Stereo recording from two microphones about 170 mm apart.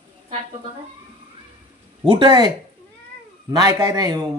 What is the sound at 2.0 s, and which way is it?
Speech, 30° right (ahead or behind).